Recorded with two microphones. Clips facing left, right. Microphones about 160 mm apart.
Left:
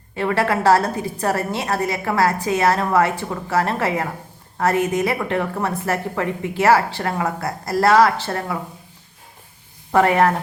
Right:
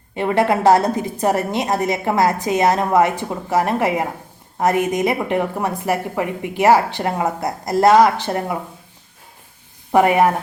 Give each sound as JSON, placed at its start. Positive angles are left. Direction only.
{"t": 0.2, "sound": "a woman's voice", "side_deg": -20}
{"t": 9.9, "sound": "a woman's voice", "side_deg": -15}